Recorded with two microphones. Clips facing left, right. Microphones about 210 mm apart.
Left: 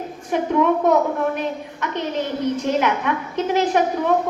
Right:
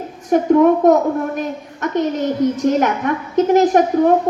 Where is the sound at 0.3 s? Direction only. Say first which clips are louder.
Right 7 dB; 45° right (ahead or behind).